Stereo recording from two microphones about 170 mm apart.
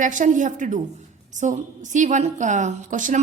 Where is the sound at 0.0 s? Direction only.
50° right (ahead or behind).